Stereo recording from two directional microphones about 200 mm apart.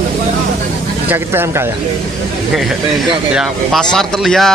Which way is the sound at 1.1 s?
10° right (ahead or behind).